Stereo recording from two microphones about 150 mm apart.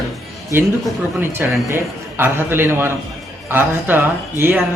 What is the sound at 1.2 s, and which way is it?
Speech, 15° right (ahead or behind).